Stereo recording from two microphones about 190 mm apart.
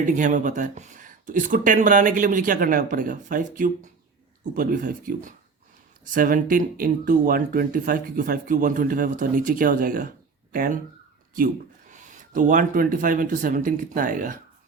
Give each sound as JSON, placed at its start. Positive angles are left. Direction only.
{"t": 0.0, "sound": "speech", "side_deg": -40}